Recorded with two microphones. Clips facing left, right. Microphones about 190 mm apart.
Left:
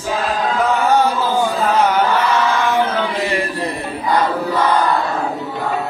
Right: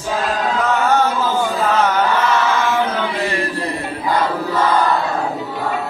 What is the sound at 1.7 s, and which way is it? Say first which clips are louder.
Chant: left 1 dB; 10° left (ahead or behind).